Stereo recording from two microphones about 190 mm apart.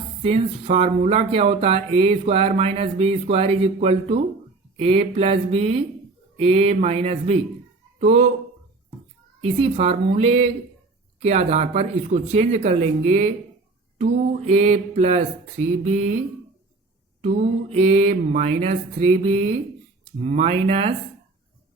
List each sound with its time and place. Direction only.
0.2 s speech: 30° right (ahead or behind)
9.4 s speech: 30° right (ahead or behind)
14.4 s speech: 35° right (ahead or behind)
17.2 s speech: 35° right (ahead or behind)